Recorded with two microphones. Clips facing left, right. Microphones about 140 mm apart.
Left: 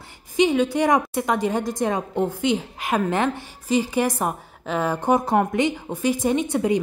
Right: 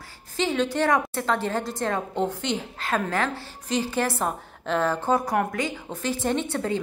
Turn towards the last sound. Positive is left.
turn(degrees=15)  # may be behind; listen again after turning